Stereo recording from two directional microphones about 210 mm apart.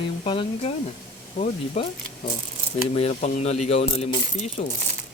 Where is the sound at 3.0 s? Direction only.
30° left (ahead or behind).